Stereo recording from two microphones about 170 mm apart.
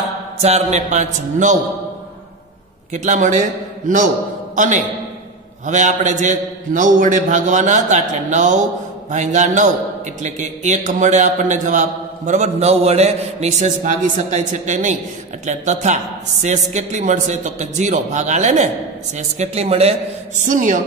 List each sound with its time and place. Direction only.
0.4 s a man's voice: 40° right (ahead or behind)
2.9 s a man's voice: 45° right (ahead or behind)
20.4 s a man's voice: 50° right (ahead or behind)